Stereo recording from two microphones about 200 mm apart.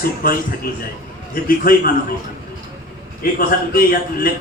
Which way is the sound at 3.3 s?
45° left (ahead or behind).